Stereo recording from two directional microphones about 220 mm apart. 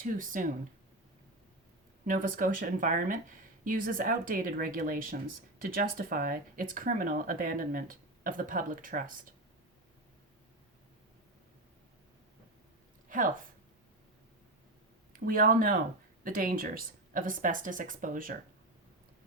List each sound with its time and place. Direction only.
0.0 s speech: 40° right (ahead or behind)
2.0 s speech: 35° right (ahead or behind)
13.1 s a sound: 40° right (ahead or behind)
15.1 s speech: 40° right (ahead or behind)